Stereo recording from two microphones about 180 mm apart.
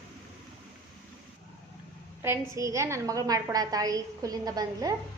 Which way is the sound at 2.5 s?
15° right (ahead or behind).